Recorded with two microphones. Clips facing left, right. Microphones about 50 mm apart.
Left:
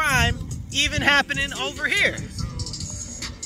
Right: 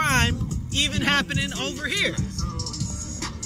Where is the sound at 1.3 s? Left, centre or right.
Centre.